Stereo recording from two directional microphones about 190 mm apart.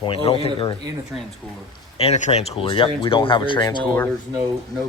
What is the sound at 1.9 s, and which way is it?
Speech, 35° left (ahead or behind).